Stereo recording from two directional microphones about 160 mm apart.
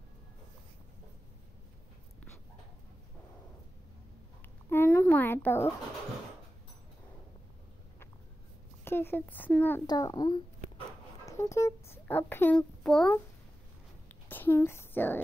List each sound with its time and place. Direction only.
4.6 s a sound: 15° left (ahead or behind)
8.8 s speech: 15° left (ahead or behind)
9.8 s a child's voice: 25° left (ahead or behind); by 13.1 s 5° left (ahead or behind)
14.3 s speech: 15° left (ahead or behind)